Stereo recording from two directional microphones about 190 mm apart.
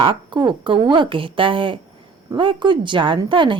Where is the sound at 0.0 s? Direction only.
25° right (ahead or behind).